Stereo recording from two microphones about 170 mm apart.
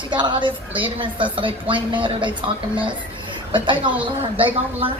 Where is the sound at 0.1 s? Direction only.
25° right (ahead or behind).